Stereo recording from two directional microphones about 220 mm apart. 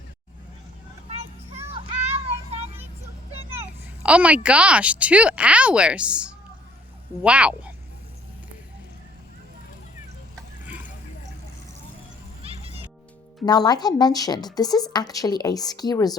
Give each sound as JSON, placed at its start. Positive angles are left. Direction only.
{"t": 2.2, "sound": "child singing", "side_deg": -30}
{"t": 4.0, "sound": "speech", "side_deg": -5}
{"t": 12.4, "sound": "music", "side_deg": -25}
{"t": 13.4, "sound": "speech", "side_deg": 20}